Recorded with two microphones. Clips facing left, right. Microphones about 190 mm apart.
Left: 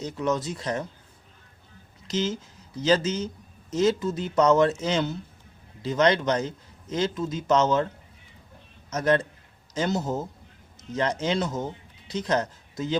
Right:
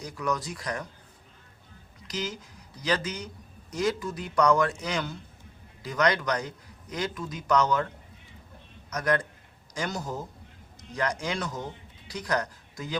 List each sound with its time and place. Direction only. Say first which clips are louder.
0.0 s a man's voice: left 4 dB; 25° left (ahead or behind)
2.0 s a man's voice: left 7 dB; 25° left (ahead or behind)
8.9 s a man's voice: left 4 dB; 25° left (ahead or behind)